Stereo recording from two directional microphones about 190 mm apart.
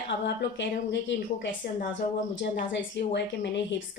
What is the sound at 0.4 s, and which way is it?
Speech, 70° left (ahead or behind).